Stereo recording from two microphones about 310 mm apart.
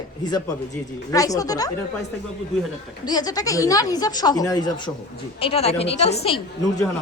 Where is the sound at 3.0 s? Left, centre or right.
Centre.